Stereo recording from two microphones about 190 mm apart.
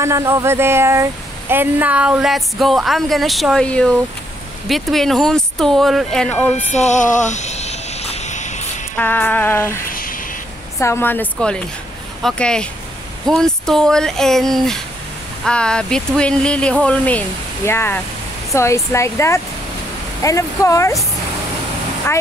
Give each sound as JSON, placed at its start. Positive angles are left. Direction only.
{"t": 0.0, "sound": "speech", "side_deg": -15}
{"t": 6.6, "sound": "music", "side_deg": 35}
{"t": 8.9, "sound": "speech", "side_deg": 10}
{"t": 9.9, "sound": "a sound", "side_deg": 50}
{"t": 10.8, "sound": "speech", "side_deg": 15}